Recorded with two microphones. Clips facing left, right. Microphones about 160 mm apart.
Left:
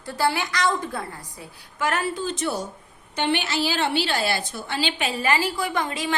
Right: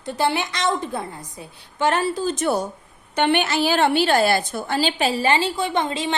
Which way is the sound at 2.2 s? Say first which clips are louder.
Right 5 dB; 50° right (ahead or behind).